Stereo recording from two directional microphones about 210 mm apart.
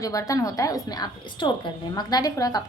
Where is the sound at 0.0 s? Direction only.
15° left (ahead or behind).